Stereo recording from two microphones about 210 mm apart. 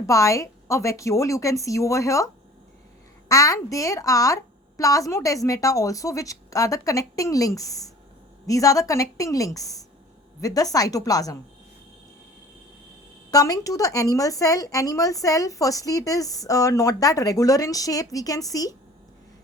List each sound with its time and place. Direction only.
0.0 s a woman's voice: 15° left (ahead or behind)
13.3 s a woman's voice: 15° left (ahead or behind)